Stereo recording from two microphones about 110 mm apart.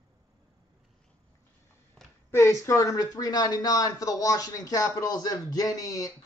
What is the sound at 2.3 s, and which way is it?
Speech, 25° left (ahead or behind).